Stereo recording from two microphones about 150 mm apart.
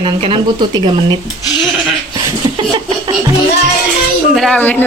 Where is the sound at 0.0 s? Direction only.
35° right (ahead or behind).